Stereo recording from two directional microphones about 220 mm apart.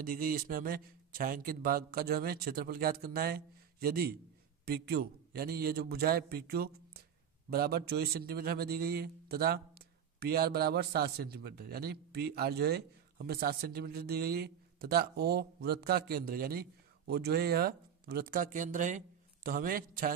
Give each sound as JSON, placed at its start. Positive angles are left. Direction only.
{"t": 0.0, "sound": "a man's voice", "side_deg": -40}